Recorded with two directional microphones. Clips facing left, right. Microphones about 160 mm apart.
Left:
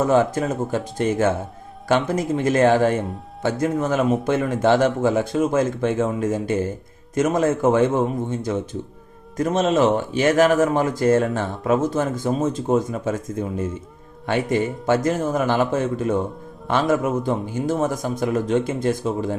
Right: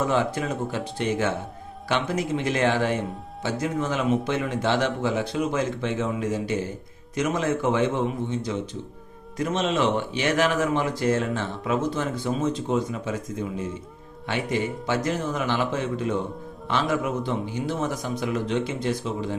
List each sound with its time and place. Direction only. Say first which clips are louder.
0.0 s speech: left 6 dB; 45° left (ahead or behind)